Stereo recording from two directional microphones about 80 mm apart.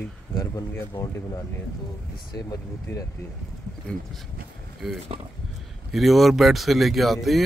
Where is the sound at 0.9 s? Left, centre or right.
Left.